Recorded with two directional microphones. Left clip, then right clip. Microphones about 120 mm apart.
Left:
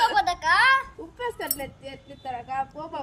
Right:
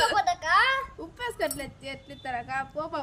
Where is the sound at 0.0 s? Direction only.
15° right (ahead or behind).